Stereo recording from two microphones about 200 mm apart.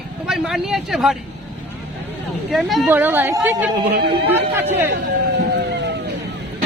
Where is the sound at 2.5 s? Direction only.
Centre (ahead or behind).